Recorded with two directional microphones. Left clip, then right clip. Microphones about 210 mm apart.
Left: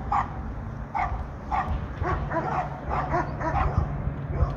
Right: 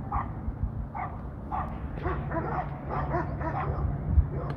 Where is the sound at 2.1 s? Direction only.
55° left (ahead or behind).